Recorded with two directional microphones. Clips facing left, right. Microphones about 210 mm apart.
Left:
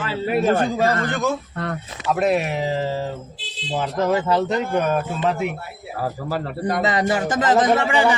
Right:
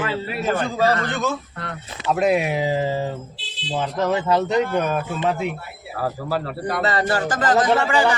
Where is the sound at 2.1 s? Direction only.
Centre (ahead or behind).